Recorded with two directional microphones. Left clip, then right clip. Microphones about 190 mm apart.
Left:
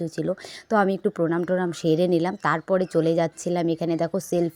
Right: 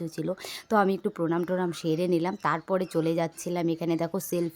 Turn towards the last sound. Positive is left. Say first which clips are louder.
# left 5 dB
turn(degrees=10)  # may be behind; listen again after turning